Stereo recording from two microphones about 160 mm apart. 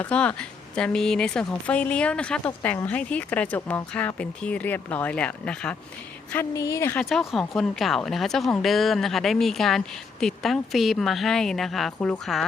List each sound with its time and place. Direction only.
0.0 s speech: 10° left (ahead or behind)
6.3 s a woman's voice: 20° left (ahead or behind)
6.9 s speech: centre (ahead or behind)